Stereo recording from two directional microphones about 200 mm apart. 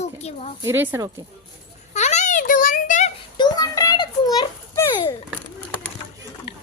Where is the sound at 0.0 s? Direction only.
35° left (ahead or behind).